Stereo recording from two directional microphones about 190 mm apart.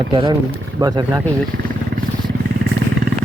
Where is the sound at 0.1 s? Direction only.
25° right (ahead or behind).